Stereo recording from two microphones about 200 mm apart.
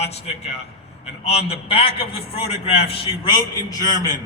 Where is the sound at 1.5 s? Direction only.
30° left (ahead or behind).